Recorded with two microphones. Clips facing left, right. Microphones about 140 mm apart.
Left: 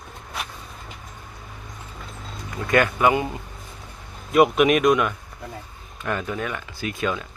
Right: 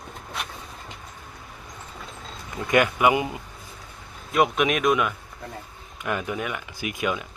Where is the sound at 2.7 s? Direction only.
15° right (ahead or behind).